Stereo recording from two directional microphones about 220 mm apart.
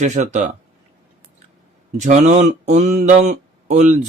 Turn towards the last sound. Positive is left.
turn(degrees=-30)  # may be behind; listen again after turning